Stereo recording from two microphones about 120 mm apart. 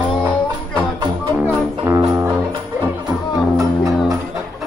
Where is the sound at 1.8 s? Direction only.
20° right (ahead or behind).